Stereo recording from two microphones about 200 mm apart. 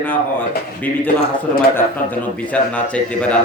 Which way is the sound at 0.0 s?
10° left (ahead or behind).